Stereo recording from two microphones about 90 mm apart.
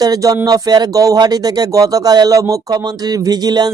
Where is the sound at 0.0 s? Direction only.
45° right (ahead or behind).